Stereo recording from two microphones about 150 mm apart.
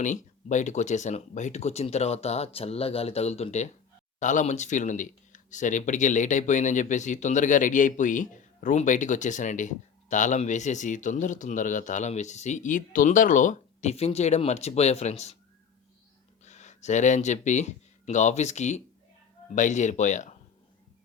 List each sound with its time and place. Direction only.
0.0 s speech: 55° left (ahead or behind)
16.4 s speech: 50° left (ahead or behind)